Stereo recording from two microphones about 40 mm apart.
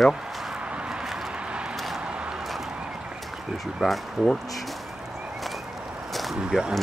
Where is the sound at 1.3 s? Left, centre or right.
Right.